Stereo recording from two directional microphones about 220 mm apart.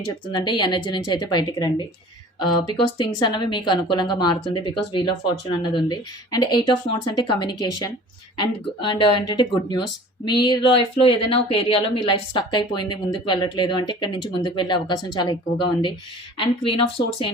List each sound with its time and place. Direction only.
0.0 s speech: 20° left (ahead or behind)